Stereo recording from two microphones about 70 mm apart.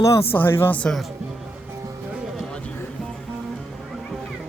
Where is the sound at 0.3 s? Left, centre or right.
Left.